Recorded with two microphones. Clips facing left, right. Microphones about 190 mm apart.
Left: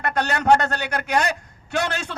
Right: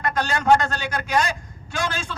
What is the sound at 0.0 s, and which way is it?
A man's voice, 65° left (ahead or behind).